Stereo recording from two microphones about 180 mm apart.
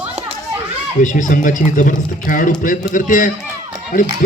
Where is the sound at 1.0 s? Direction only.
45° left (ahead or behind).